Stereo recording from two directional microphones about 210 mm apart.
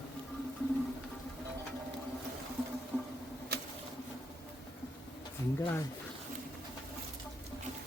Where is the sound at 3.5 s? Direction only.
50° right (ahead or behind).